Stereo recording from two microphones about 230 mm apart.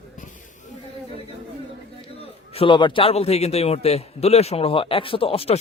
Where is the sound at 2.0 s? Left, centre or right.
Left.